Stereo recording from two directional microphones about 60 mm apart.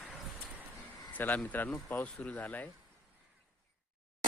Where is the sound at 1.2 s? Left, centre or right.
Left.